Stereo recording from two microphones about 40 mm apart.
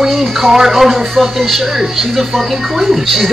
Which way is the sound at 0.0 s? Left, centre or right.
Centre.